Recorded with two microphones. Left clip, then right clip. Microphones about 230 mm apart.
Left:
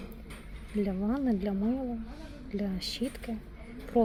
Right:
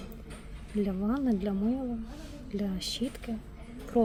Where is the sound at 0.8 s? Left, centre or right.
Centre.